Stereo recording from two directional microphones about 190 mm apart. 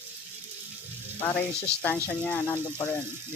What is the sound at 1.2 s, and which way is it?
Speech, 10° left (ahead or behind).